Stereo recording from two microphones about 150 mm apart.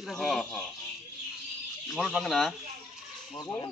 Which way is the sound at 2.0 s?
5° right (ahead or behind).